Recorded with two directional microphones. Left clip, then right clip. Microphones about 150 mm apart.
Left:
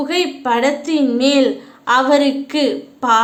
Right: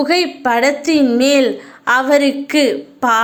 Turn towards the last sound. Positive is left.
turn(degrees=-25)  # may be behind; listen again after turning